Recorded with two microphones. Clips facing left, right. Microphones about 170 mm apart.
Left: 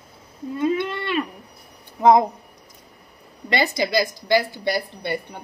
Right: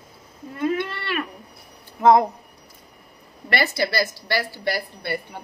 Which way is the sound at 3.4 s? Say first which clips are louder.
Left 1 dB; 20° left (ahead or behind).